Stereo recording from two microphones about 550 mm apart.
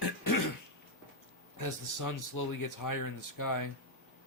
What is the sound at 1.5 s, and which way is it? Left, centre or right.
Speech, left.